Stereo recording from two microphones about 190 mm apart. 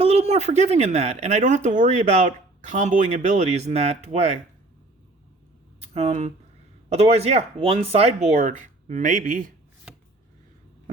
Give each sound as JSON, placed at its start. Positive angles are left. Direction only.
{"t": 0.0, "sound": "speech", "side_deg": -35}
{"t": 5.8, "sound": "speech", "side_deg": -35}